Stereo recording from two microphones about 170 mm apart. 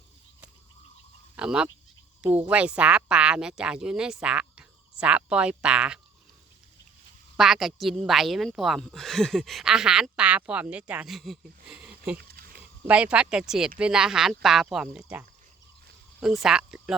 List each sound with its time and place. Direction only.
1.4 s speech: 5° right (ahead or behind)
7.3 s speech: centre (ahead or behind)
12.1 s a sound: 60° right (ahead or behind)
12.9 s speech: 5° right (ahead or behind)
16.2 s speech: centre (ahead or behind)